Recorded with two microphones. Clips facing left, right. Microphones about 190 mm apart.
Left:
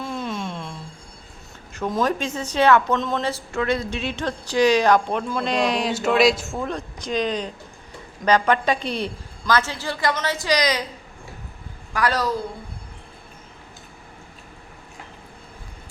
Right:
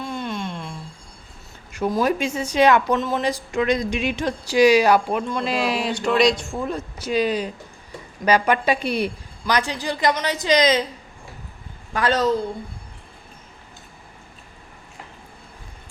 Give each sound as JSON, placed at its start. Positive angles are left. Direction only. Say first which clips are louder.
{"t": 0.0, "sound": "a sound", "louder": "even", "side_deg": 0}
{"t": 1.9, "sound": "speech", "louder": "right 2 dB", "side_deg": -10}
{"t": 3.2, "sound": "speech", "louder": "right 2 dB", "side_deg": -15}
{"t": 11.9, "sound": "a woman's voice", "louder": "right 2 dB", "side_deg": -25}